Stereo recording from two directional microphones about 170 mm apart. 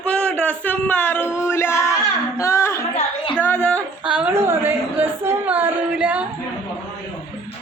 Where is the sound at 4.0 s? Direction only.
5° right (ahead or behind).